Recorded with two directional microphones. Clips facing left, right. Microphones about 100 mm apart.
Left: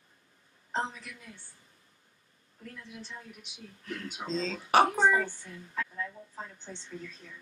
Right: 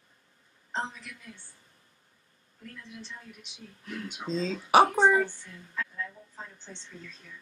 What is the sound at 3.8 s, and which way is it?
Speech, 10° right (ahead or behind).